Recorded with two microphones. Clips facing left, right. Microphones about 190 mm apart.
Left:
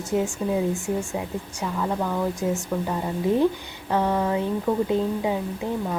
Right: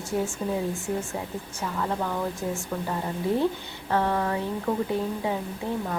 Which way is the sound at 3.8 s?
15° left (ahead or behind).